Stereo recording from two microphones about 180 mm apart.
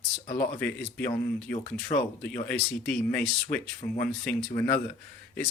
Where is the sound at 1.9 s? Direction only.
30° left (ahead or behind).